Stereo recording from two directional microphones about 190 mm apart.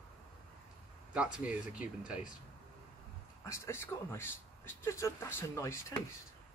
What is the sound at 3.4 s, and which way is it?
Speech, 15° left (ahead or behind).